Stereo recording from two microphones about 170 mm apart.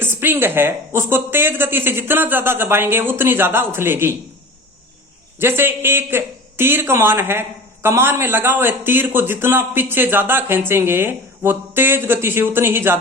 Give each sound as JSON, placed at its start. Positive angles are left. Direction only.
{"t": 0.0, "sound": "a man's voice", "side_deg": -15}
{"t": 5.4, "sound": "a man's voice", "side_deg": -15}